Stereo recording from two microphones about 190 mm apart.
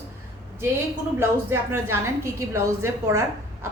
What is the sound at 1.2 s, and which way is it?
A woman's voice, 10° right (ahead or behind).